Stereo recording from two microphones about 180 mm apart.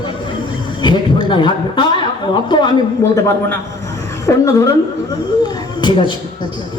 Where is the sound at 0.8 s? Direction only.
25° left (ahead or behind).